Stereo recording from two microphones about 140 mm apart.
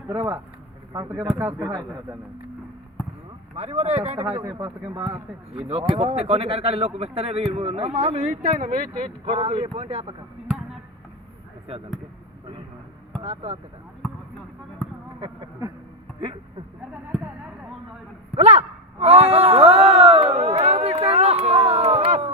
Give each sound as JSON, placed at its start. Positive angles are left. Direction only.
{"t": 0.9, "sound": "speech", "side_deg": -20}
{"t": 3.5, "sound": "speech", "side_deg": -50}
{"t": 4.4, "sound": "speech", "side_deg": -30}
{"t": 5.5, "sound": "speech", "side_deg": -45}
{"t": 9.2, "sound": "speech", "side_deg": -45}
{"t": 13.2, "sound": "speech", "side_deg": -50}
{"t": 15.2, "sound": "speech", "side_deg": -45}
{"t": 16.2, "sound": "a sound", "side_deg": -40}
{"t": 18.3, "sound": "a sound", "side_deg": -50}